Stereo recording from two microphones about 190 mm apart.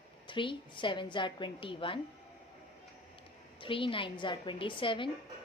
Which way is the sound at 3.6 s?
25° left (ahead or behind).